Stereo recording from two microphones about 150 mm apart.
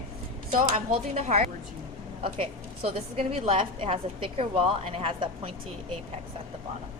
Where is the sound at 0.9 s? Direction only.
45° right (ahead or behind).